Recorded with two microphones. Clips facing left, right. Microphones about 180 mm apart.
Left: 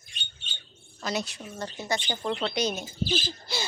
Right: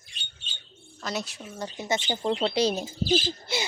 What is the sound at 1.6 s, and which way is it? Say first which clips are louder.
Speech: right 2 dB; 20° right (ahead or behind).